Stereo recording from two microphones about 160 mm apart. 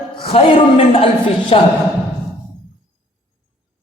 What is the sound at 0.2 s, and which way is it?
A man's voice, 35° left (ahead or behind).